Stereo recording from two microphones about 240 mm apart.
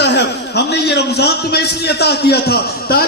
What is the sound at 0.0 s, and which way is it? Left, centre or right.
A man's voice, left.